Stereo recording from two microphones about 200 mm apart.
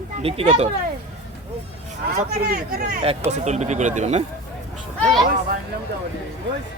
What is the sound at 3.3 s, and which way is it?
Speech, 35° right (ahead or behind).